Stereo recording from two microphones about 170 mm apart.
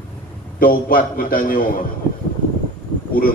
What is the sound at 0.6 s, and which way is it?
A man's voice, 55° left (ahead or behind).